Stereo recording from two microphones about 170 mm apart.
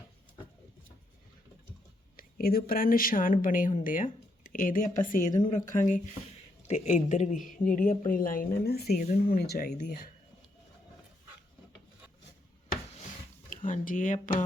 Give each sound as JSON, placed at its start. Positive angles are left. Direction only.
{"t": 2.1, "sound": "speech", "side_deg": 60}
{"t": 13.5, "sound": "speech", "side_deg": 50}